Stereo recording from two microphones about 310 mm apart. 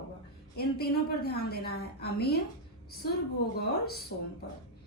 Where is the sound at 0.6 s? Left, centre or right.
Left.